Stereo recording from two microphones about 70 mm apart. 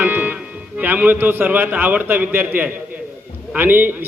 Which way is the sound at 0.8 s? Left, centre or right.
Right.